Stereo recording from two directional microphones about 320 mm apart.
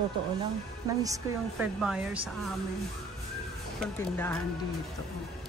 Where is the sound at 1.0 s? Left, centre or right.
Centre.